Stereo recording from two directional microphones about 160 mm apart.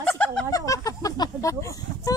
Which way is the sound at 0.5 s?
20° left (ahead or behind).